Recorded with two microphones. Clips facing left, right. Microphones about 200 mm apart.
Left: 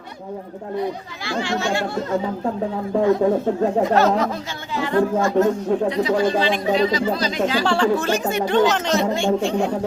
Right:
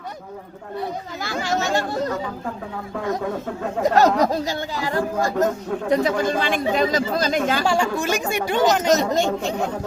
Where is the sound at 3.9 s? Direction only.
40° right (ahead or behind).